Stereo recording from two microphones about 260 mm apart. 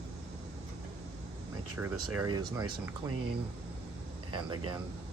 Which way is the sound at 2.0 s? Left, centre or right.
Right.